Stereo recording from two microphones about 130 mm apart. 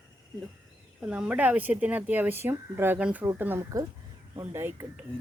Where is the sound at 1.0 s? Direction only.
10° right (ahead or behind).